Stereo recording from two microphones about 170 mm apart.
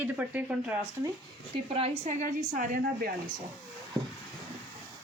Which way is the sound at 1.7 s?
35° right (ahead or behind).